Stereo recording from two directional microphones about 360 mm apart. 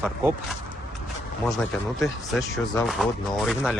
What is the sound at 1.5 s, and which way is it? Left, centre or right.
Speech, centre.